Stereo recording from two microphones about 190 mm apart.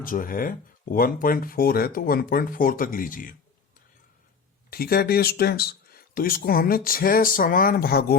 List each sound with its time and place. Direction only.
0.0 s speech: 45° left (ahead or behind)
4.7 s speech: 55° left (ahead or behind)